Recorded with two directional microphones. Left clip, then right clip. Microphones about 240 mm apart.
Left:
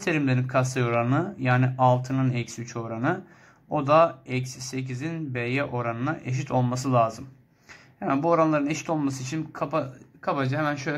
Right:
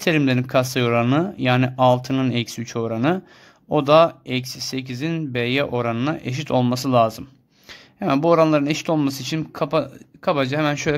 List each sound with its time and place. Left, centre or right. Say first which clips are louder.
0.0 s speech: right 6 dB; right